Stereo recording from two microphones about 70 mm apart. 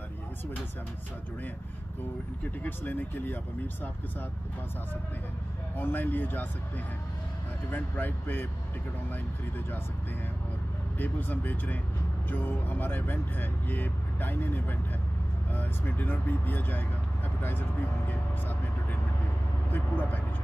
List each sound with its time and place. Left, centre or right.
2.6 s speech: left
5.8 s speech: left
7.7 s speech: left
11.0 s speech: left
17.4 s vehicle: left
19.7 s speech: left